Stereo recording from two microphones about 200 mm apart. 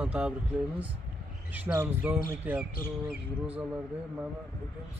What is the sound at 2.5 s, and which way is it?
Speech, 10° right (ahead or behind).